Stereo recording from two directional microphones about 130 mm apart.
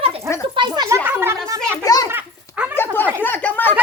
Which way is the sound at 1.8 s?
30° left (ahead or behind).